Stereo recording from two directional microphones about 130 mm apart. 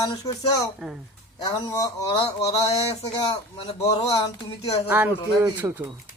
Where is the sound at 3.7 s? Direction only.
50° left (ahead or behind).